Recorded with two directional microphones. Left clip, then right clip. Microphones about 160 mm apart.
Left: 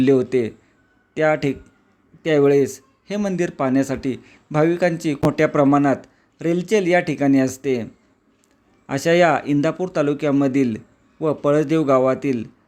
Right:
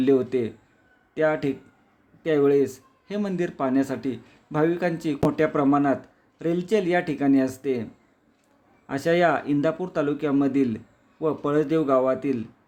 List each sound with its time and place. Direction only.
0.0 s speech: 25° left (ahead or behind)
8.9 s speech: 25° left (ahead or behind)